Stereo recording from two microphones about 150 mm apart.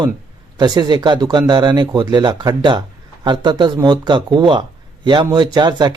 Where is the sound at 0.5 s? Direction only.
25° right (ahead or behind).